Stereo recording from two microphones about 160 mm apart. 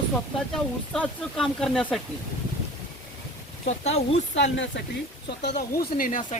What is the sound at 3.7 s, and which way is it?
Speech, 40° left (ahead or behind).